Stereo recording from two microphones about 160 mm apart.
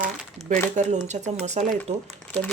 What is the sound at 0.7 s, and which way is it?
Speech, 45° right (ahead or behind).